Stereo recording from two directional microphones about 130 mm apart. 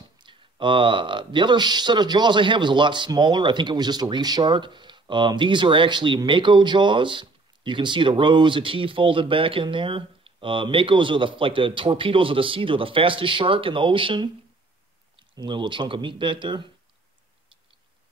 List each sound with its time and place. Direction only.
0.2 s speech: 40° right (ahead or behind)
15.3 s speech: 40° right (ahead or behind)